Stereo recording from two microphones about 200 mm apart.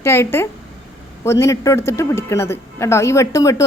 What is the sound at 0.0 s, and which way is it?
A man's voice, 15° left (ahead or behind).